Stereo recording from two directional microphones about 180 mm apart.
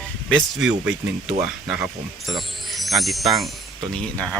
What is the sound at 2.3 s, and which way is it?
Music, centre (ahead or behind).